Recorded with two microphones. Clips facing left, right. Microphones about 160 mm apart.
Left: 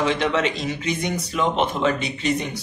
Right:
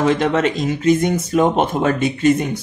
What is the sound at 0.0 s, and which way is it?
Speech, 45° right (ahead or behind).